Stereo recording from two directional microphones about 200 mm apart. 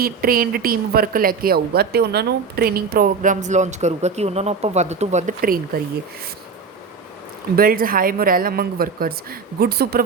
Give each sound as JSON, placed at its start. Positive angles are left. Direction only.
{"t": 0.0, "sound": "speech", "side_deg": -50}
{"t": 7.5, "sound": "speech", "side_deg": -45}